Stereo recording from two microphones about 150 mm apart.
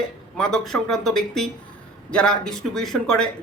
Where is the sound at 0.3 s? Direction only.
5° left (ahead or behind).